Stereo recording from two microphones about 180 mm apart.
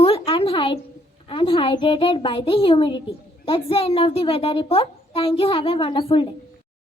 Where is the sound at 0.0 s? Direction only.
30° left (ahead or behind).